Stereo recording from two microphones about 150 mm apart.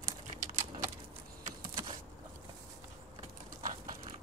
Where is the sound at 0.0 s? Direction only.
60° right (ahead or behind).